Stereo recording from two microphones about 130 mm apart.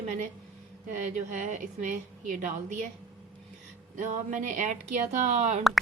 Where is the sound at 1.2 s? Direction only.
75° right (ahead or behind).